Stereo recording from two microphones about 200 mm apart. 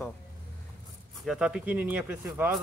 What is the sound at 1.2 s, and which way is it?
Speech, centre (ahead or behind).